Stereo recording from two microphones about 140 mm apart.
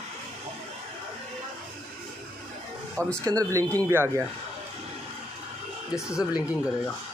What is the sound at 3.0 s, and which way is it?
Speech, 10° left (ahead or behind).